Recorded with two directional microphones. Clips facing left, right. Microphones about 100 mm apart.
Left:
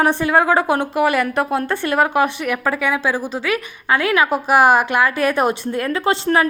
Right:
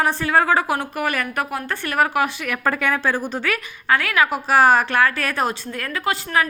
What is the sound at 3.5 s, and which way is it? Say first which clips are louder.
A woman's voice: left 2 dB; 20° left (ahead or behind).